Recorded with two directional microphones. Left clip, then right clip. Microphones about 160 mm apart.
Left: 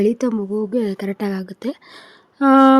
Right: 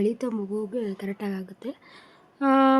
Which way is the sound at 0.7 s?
45° left (ahead or behind).